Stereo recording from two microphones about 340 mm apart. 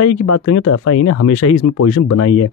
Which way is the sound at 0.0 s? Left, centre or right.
Left.